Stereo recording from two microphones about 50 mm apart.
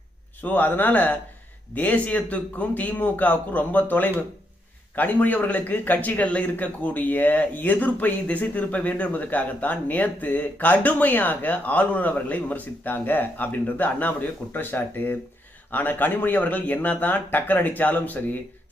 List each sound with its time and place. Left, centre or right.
0.4 s a man's voice: left